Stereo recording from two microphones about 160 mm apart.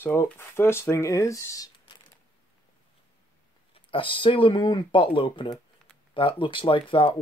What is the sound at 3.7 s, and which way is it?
Speech, 30° left (ahead or behind).